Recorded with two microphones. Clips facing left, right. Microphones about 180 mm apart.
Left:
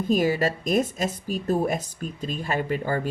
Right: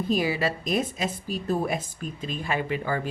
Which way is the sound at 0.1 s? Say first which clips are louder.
Left 4 dB; 45° left (ahead or behind).